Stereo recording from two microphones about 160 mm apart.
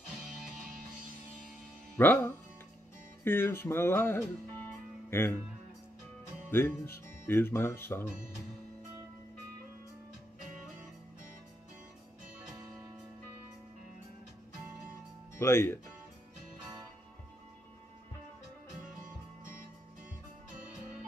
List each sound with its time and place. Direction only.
2.0 s speech: 10° left (ahead or behind)
6.5 s speech: 15° left (ahead or behind)
15.3 s speech: 15° left (ahead or behind)